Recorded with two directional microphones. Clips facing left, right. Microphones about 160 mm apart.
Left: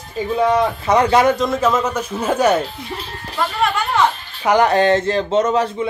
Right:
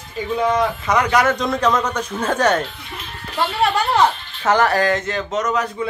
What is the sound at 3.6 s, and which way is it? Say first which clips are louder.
Music: right 2 dB; 35° right (ahead or behind).